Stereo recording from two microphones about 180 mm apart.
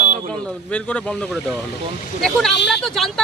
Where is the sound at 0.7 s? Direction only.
5° left (ahead or behind).